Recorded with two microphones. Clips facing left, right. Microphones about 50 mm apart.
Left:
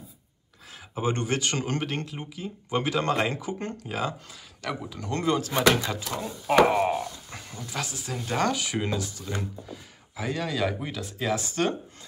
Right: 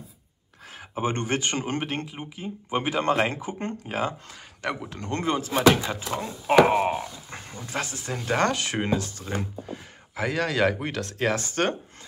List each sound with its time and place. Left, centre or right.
0.7 s speech: right
5.1 s speech: right
7.6 s speech: right